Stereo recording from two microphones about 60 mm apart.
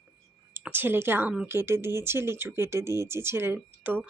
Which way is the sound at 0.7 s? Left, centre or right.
Right.